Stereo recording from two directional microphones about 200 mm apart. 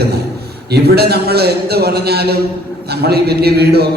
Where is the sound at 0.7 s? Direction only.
55° right (ahead or behind).